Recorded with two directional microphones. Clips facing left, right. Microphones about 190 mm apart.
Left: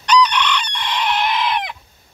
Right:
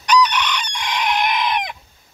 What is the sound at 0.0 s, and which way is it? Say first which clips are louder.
Chicken: left 1 dB; 10° right (ahead or behind).